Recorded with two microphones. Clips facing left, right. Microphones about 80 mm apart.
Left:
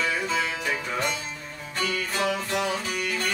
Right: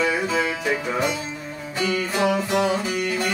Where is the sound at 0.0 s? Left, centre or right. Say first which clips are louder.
Right 5 dB; centre.